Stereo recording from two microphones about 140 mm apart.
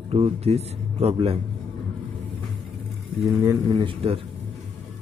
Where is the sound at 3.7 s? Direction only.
35° right (ahead or behind).